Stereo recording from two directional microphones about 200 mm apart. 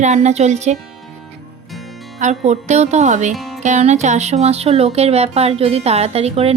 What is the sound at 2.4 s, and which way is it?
Speech, 35° right (ahead or behind).